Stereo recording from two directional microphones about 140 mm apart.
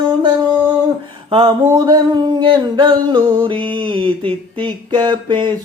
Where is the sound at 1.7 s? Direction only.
30° right (ahead or behind).